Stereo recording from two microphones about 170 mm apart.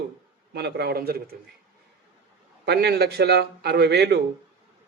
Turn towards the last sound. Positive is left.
turn(degrees=-75)  # may be behind; listen again after turning